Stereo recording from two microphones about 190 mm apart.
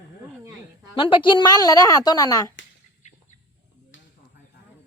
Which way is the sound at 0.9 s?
25° left (ahead or behind).